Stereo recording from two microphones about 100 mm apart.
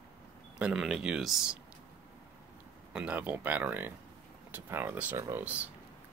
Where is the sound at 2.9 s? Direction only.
15° right (ahead or behind).